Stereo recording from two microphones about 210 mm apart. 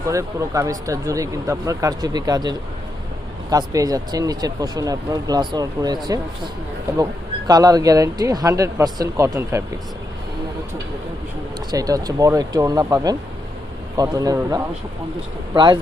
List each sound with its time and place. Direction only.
0.1 s speech: 15° right (ahead or behind)
7.0 s speech: 15° right (ahead or behind)
11.7 s speech: 15° right (ahead or behind)